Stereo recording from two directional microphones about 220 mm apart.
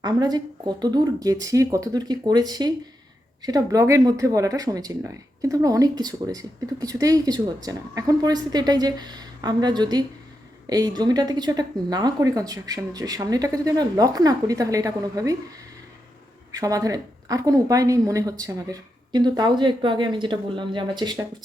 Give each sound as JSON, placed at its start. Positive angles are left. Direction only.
{"t": 0.0, "sound": "speech", "side_deg": -20}
{"t": 16.5, "sound": "speech", "side_deg": -15}